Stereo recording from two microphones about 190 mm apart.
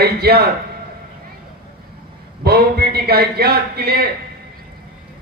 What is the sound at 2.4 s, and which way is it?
Speech, 55° right (ahead or behind).